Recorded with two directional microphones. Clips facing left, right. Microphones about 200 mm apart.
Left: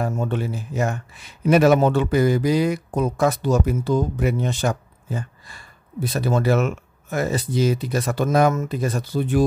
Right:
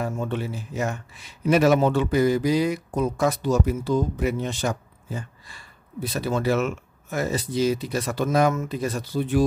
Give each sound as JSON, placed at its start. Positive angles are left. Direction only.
{"t": 0.0, "sound": "a man's voice", "side_deg": 45}